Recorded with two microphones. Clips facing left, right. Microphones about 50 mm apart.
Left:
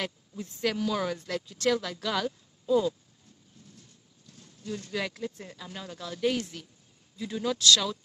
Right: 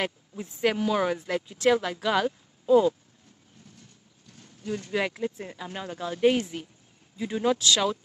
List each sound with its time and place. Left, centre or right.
0.0 s speech: right
4.4 s speech: right